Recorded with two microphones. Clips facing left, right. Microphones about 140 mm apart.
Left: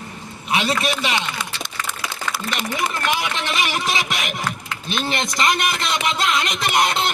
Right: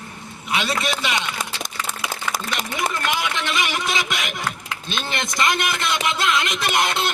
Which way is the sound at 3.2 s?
20° left (ahead or behind).